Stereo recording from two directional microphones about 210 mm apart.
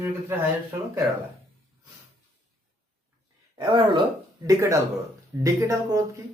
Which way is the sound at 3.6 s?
25° right (ahead or behind).